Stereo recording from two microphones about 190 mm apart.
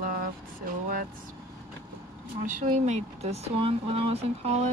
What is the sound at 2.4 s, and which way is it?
Speech, 40° right (ahead or behind).